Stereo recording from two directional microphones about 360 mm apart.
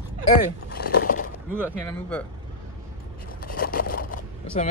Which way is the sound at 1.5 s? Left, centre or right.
Centre.